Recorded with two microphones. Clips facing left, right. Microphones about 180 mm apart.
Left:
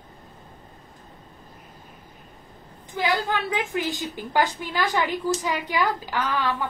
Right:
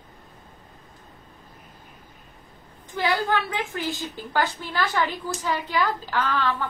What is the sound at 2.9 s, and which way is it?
A woman's voice, 15° left (ahead or behind).